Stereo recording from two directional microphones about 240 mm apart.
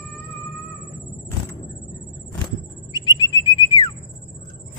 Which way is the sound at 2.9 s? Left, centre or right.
Centre.